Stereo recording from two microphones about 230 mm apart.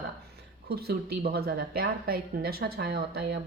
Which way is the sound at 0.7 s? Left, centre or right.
Right.